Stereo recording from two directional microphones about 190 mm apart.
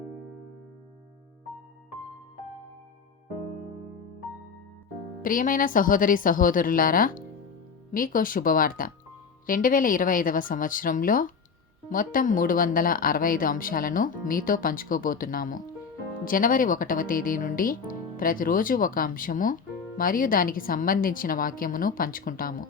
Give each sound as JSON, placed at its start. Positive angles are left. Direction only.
{"t": 5.2, "sound": "speech", "side_deg": 45}